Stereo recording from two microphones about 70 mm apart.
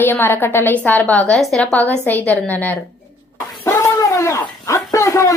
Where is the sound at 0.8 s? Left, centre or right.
Left.